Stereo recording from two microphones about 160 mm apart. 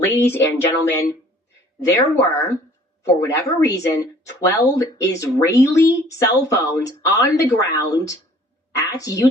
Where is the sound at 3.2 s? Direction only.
20° left (ahead or behind).